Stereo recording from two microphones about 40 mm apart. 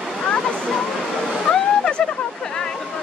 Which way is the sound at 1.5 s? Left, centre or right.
Left.